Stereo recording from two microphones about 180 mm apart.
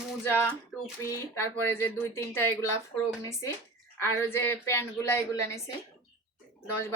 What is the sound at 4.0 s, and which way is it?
Speech, 15° left (ahead or behind).